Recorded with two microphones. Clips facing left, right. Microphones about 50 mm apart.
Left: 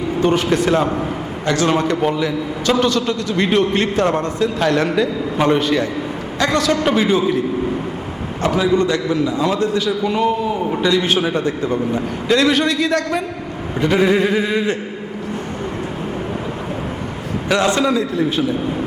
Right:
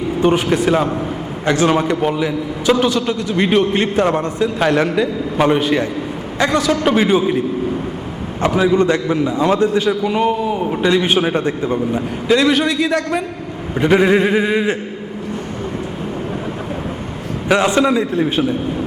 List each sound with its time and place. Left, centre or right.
0.2 s a man's voice: centre
1.5 s a man's voice: centre
1.7 s a man's voice: centre
6.9 s a man's voice: centre
8.4 s a man's voice: right
12.3 s a man's voice: centre
13.7 s a man's voice: right
17.5 s a man's voice: right